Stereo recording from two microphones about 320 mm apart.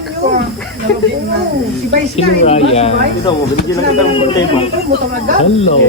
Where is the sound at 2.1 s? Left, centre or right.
Centre.